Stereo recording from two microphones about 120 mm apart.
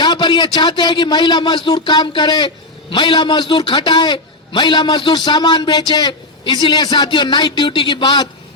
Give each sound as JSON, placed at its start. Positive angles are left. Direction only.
{"t": 0.0, "sound": "a man's voice", "side_deg": 40}